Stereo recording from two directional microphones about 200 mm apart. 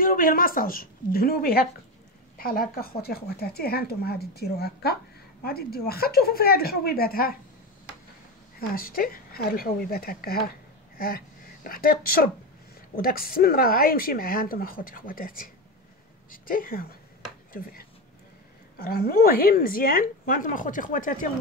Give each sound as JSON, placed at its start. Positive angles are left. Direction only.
{"t": 0.0, "sound": "a woman's voice", "side_deg": 45}
{"t": 8.5, "sound": "speech", "side_deg": 45}